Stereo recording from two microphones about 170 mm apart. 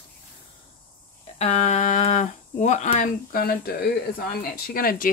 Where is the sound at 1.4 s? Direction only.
40° left (ahead or behind).